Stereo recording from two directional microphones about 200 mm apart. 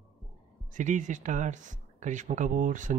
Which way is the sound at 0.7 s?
40° right (ahead or behind).